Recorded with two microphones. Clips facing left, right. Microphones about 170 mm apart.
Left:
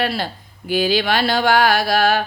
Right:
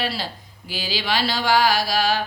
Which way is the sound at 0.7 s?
55° left (ahead or behind).